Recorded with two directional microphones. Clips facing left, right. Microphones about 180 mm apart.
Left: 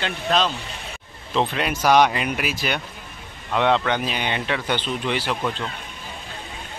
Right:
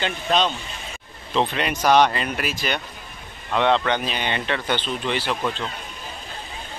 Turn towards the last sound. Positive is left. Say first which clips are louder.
# even
turn(degrees=5)  # may be behind; listen again after turning